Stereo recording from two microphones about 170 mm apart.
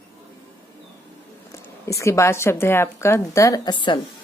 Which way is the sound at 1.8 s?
15° left (ahead or behind).